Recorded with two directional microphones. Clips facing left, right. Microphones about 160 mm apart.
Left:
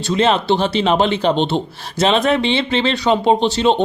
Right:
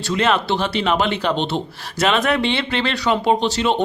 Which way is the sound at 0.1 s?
25° left (ahead or behind).